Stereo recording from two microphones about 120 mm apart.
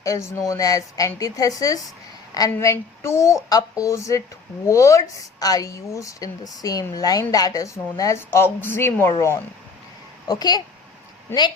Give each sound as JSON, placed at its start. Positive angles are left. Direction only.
{"t": 0.0, "sound": "a woman's voice", "side_deg": 25}
{"t": 10.2, "sound": "speech", "side_deg": 35}